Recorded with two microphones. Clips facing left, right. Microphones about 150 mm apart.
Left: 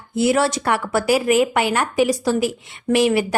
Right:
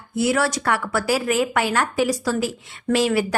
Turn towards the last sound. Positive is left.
turn(degrees=15)  # may be behind; listen again after turning